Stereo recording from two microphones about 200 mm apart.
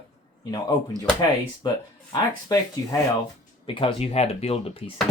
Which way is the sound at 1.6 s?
20° left (ahead or behind).